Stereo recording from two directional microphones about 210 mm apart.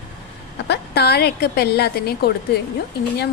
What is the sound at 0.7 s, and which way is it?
A woman's voice, 50° left (ahead or behind).